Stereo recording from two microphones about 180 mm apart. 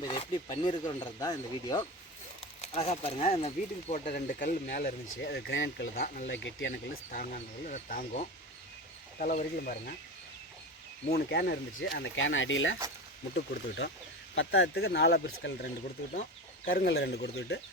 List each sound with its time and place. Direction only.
0.0 s speech: 25° left (ahead or behind)
2.4 s speech: 35° left (ahead or behind)
4.0 s speech: 55° left (ahead or behind); by 7.0 s 75° left (ahead or behind)
7.1 s speech: 45° left (ahead or behind)
11.1 s speech: 65° left (ahead or behind); by 12.7 s 90° left
13.3 s speech: 65° left (ahead or behind)
14.3 s speech: 80° left